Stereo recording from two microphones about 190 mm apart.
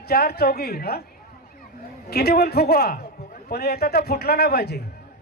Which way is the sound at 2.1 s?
55° left (ahead or behind).